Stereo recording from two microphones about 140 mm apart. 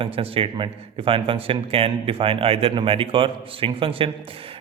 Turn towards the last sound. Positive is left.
turn(degrees=-40)  # may be behind; listen again after turning